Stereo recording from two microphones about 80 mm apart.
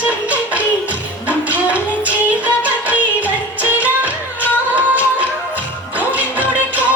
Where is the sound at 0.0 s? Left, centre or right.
Centre.